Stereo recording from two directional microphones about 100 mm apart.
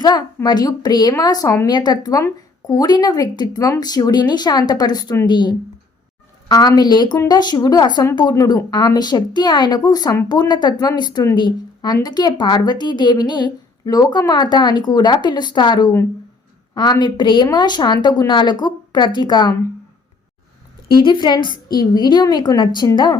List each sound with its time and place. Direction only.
0.4 s a woman's voice: 40° left (ahead or behind)
8.4 s a woman's voice: 30° left (ahead or behind)
8.7 s a woman's voice: 45° left (ahead or behind)
20.8 s a woman's voice: 50° left (ahead or behind)